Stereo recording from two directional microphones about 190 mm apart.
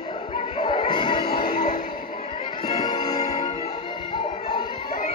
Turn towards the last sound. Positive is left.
turn(degrees=25)  # may be behind; listen again after turning